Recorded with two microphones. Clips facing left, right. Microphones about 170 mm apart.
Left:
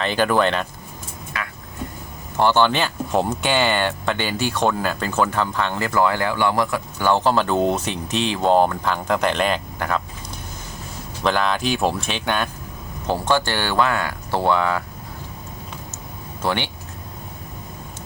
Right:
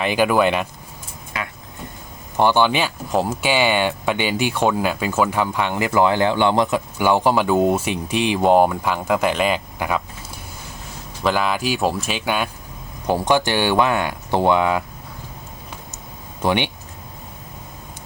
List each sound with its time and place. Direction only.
0.0 s speech: 10° right (ahead or behind)
2.4 s speech: 10° right (ahead or behind)
11.2 s speech: 5° right (ahead or behind)
16.4 s speech: 15° right (ahead or behind)